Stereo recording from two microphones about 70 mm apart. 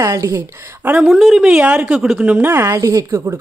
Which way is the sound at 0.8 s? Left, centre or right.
Right.